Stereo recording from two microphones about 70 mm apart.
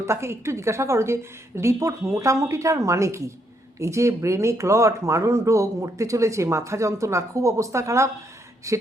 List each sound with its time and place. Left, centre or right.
0.0 s speech: right